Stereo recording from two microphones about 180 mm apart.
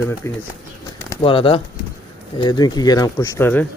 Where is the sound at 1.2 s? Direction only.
30° left (ahead or behind); by 3.7 s 10° left (ahead or behind).